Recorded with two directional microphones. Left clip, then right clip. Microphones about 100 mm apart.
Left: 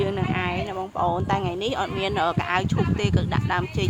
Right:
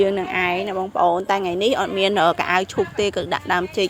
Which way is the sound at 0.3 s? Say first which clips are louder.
Right 6 dB; 80° right.